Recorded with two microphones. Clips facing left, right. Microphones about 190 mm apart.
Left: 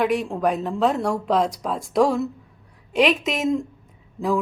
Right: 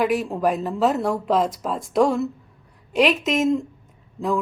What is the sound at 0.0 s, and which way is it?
Speech, centre (ahead or behind).